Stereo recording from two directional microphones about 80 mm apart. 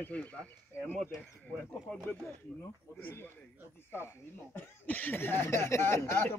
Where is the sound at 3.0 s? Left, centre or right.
Left.